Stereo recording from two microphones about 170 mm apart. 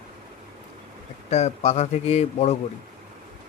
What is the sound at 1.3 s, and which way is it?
Speech, 40° left (ahead or behind).